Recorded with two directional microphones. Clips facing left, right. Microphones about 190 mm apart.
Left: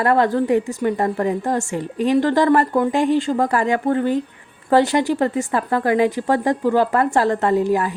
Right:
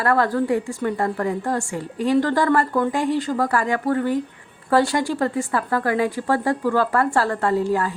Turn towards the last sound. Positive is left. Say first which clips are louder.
# left 3 dB
turn(degrees=15)  # may be behind; listen again after turning